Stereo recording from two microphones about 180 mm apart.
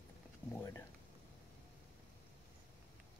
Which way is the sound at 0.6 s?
15° left (ahead or behind).